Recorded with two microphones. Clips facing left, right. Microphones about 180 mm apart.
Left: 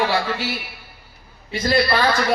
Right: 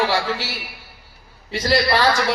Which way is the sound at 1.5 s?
90° right.